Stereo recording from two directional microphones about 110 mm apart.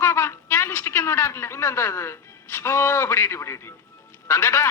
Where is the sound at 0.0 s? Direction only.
25° left (ahead or behind).